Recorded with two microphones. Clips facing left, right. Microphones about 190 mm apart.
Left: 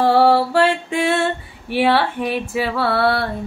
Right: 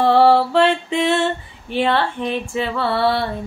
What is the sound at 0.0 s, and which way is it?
Female singing, 5° left (ahead or behind).